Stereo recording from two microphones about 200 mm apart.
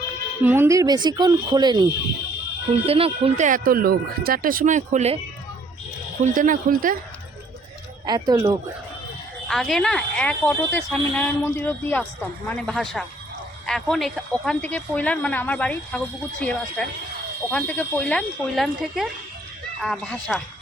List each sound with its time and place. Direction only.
0.4 s speech: 10° right (ahead or behind); by 5.2 s 35° right (ahead or behind)
6.2 s speech: 40° right (ahead or behind)
8.0 s speech: 20° right (ahead or behind)
9.5 s speech: centre (ahead or behind)